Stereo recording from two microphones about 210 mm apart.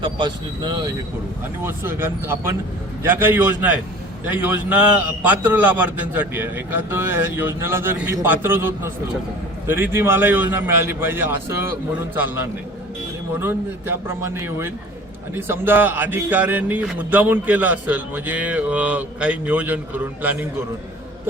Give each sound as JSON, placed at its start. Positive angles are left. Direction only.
{"t": 0.0, "sound": "speech", "side_deg": -20}
{"t": 1.6, "sound": "a man's voice", "side_deg": -10}